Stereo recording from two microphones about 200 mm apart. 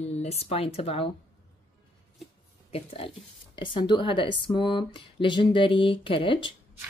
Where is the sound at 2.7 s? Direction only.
30° left (ahead or behind).